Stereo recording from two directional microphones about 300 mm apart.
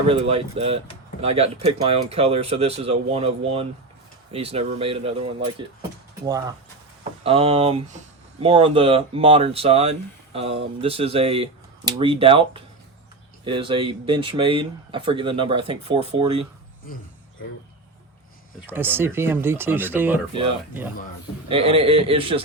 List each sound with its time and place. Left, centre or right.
0.1 s speech: centre
6.2 s speech: centre
18.7 s speech: centre
21.5 s speech: centre